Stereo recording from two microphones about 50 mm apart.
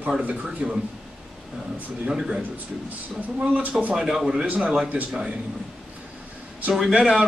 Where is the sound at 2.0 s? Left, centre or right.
Centre.